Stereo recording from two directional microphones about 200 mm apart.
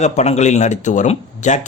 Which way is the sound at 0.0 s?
35° left (ahead or behind).